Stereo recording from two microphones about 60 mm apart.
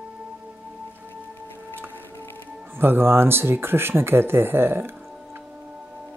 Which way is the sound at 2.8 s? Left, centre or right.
Right.